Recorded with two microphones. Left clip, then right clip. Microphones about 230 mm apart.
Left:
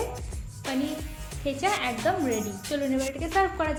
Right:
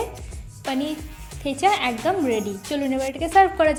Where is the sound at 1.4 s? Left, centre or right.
Right.